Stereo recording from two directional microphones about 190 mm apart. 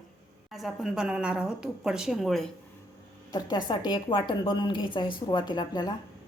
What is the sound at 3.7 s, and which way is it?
A woman's voice, 25° left (ahead or behind).